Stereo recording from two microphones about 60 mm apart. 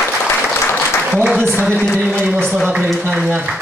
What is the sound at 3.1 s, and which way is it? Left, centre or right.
Speech, centre.